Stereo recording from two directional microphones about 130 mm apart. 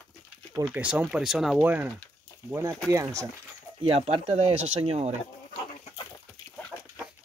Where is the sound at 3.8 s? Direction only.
50° right (ahead or behind).